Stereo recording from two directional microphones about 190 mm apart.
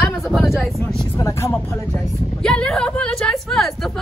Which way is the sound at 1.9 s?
5° left (ahead or behind).